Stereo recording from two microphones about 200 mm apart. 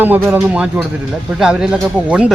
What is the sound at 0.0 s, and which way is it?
Speech, 10° right (ahead or behind).